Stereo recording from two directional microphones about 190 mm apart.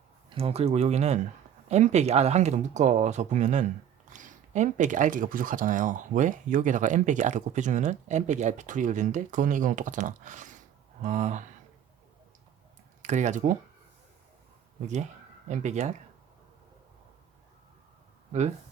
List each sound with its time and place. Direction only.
0.3 s speech: 30° right (ahead or behind)
13.0 s speech: 40° right (ahead or behind)
14.8 s speech: 40° right (ahead or behind)
18.3 s speech: 35° right (ahead or behind)